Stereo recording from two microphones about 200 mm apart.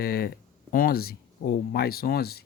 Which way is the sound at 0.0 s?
50° left (ahead or behind).